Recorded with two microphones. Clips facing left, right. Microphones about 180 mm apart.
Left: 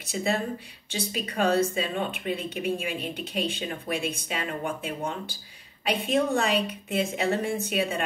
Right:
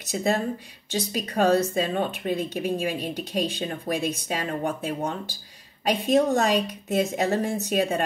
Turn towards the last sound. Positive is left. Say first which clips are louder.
# right 3 dB
turn(degrees=-40)  # may be behind; listen again after turning